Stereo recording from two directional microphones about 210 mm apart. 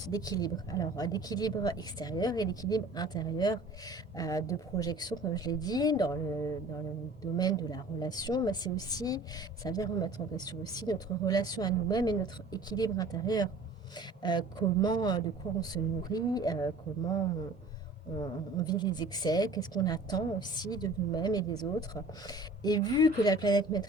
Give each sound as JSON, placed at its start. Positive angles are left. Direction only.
{"t": 0.0, "sound": "speech", "side_deg": 15}
{"t": 18.5, "sound": "speech", "side_deg": 20}